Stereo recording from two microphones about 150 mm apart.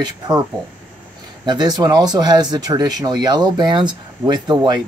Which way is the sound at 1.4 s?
30° right (ahead or behind).